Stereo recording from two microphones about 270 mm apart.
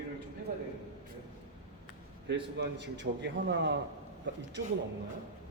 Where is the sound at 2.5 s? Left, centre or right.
Right.